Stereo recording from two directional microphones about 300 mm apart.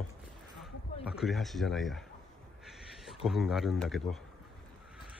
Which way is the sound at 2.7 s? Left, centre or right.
Centre.